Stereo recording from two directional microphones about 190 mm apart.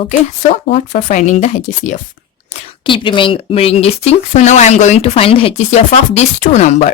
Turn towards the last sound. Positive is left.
turn(degrees=35)  # may be behind; listen again after turning